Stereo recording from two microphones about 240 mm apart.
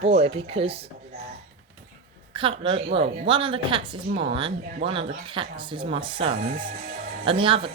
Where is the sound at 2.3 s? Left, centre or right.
Right.